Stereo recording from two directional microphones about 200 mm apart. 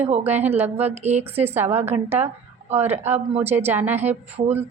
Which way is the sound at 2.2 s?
30° right (ahead or behind).